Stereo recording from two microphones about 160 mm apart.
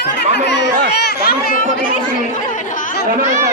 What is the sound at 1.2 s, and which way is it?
Speech, 70° left (ahead or behind).